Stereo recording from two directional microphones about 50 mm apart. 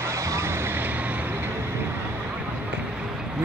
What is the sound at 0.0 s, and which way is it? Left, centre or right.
Vehicle, right.